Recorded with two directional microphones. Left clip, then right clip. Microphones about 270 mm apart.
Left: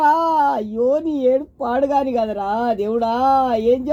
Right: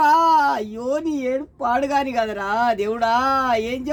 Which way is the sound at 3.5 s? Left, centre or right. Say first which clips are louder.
Left 5 dB; right.